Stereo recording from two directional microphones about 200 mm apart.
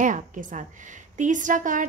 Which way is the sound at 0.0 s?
40° right (ahead or behind).